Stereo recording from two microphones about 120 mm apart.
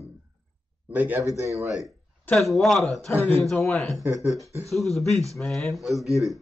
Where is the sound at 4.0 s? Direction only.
25° right (ahead or behind).